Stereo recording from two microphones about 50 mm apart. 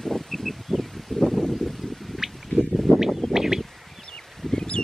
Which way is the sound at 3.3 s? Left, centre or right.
Centre.